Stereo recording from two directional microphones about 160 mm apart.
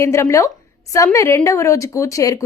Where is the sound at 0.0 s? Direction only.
15° left (ahead or behind).